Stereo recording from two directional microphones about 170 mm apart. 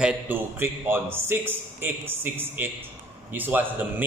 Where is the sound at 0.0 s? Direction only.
10° right (ahead or behind).